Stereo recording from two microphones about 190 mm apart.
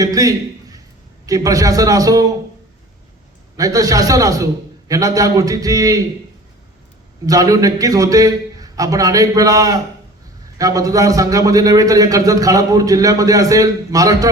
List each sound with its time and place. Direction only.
0.0 s a sound: 20° right (ahead or behind)
1.3 s a man's voice: 20° right (ahead or behind)
3.6 s a man's voice: 20° right (ahead or behind)
7.3 s a man's voice: 20° right (ahead or behind)